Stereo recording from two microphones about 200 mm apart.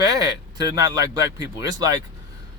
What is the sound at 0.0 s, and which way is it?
Speech, 15° right (ahead or behind).